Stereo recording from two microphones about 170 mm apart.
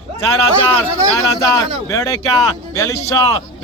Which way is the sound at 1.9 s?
20° left (ahead or behind).